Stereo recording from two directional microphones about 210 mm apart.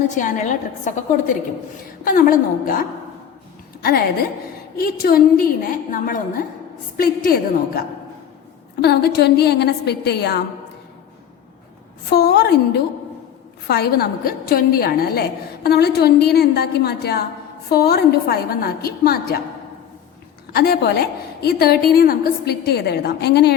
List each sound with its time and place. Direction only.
0.2 s a woman's voice: 35° left (ahead or behind)
3.8 s a woman's voice: 45° left (ahead or behind)
12.1 s a woman's voice: 50° left (ahead or behind)
13.7 s a woman's voice: 50° left (ahead or behind)
20.5 s a woman's voice: 50° left (ahead or behind)